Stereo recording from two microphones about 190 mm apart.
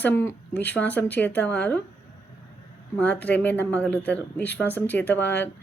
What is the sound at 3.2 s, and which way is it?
Speech, 10° left (ahead or behind).